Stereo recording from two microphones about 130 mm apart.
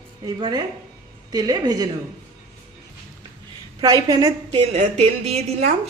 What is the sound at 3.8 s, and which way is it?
Speech, 30° right (ahead or behind).